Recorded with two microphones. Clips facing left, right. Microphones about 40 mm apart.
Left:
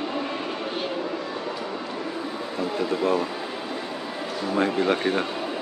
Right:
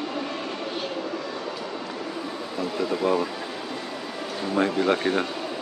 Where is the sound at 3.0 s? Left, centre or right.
Centre.